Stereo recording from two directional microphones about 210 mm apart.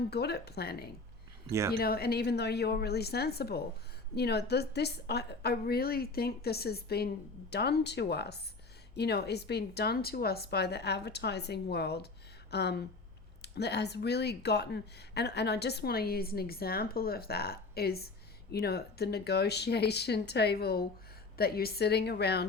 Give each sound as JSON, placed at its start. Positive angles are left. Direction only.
{"t": 0.1, "sound": "speech", "side_deg": 50}
{"t": 1.5, "sound": "speech", "side_deg": -15}
{"t": 1.7, "sound": "speech", "side_deg": 45}